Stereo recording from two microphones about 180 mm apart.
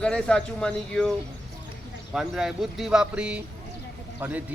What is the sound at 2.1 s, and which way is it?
Speech, 5° right (ahead or behind).